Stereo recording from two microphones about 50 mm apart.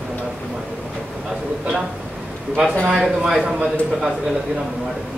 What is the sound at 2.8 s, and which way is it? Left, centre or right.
Speech, centre.